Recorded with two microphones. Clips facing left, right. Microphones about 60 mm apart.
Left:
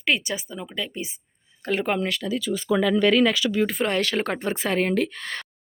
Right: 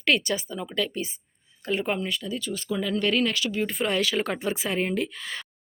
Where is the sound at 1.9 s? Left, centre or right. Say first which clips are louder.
Left 4 dB; left.